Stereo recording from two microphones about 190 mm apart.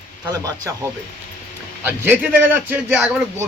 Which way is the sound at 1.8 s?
10° right (ahead or behind).